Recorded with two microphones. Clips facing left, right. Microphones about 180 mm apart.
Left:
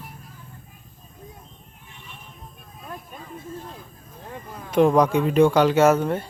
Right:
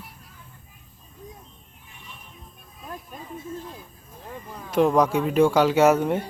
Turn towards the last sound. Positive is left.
turn(degrees=-15)  # may be behind; listen again after turning